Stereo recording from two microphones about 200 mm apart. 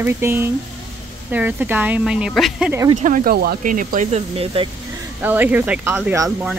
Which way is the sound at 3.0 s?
45° right (ahead or behind).